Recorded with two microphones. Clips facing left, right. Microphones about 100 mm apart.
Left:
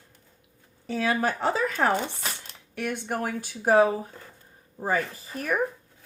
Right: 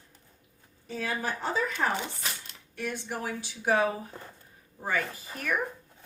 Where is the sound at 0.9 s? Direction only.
80° left.